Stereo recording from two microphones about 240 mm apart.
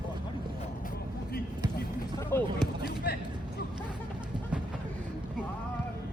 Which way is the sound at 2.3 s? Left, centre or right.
Centre.